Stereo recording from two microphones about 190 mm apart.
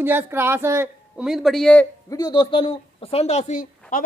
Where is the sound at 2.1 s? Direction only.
20° left (ahead or behind); by 4.0 s 40° left (ahead or behind).